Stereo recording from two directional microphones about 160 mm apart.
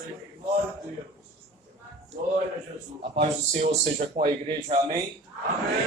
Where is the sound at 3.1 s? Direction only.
45° right (ahead or behind).